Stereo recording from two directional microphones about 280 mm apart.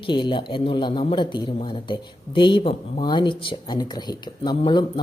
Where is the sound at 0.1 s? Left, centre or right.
Centre.